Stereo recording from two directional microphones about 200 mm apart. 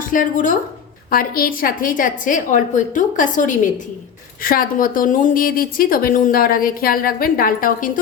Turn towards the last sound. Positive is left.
turn(degrees=45)  # may be behind; listen again after turning